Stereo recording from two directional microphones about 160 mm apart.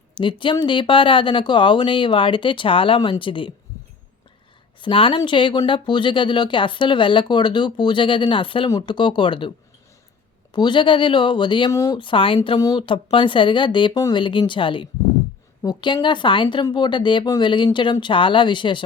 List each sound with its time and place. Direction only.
0.1 s speech: 30° left (ahead or behind)
4.8 s speech: 35° left (ahead or behind)
10.5 s speech: 30° left (ahead or behind)
11.9 s speech: 30° left (ahead or behind)